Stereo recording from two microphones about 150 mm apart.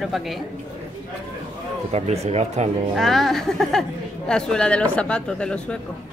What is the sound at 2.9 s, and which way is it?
A woman's voice, centre (ahead or behind).